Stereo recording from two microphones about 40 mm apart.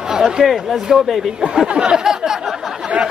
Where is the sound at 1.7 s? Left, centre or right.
Centre.